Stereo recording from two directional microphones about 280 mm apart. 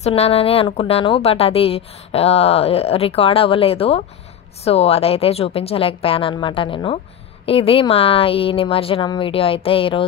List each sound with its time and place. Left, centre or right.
0.0 s a woman's voice: left